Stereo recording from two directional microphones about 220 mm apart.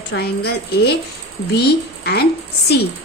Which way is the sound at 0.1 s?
60° left (ahead or behind).